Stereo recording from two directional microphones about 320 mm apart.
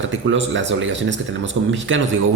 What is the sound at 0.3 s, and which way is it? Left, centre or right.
Speech, right.